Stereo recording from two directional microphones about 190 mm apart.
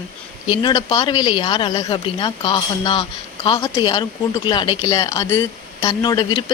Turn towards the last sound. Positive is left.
turn(degrees=25)  # may be behind; listen again after turning